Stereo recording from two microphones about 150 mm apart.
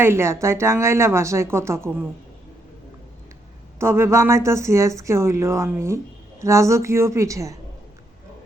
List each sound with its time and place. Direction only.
0.0 s speech: 15° right (ahead or behind)
3.8 s speech: 20° right (ahead or behind)